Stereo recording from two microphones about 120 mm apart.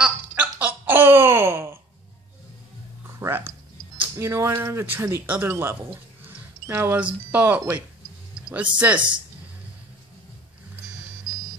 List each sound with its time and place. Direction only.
0.0 s a sound: 10° right (ahead or behind)
3.2 s computer keyboard: 20° right (ahead or behind)
4.3 s speech: 20° right (ahead or behind)
8.7 s speech: 10° right (ahead or behind)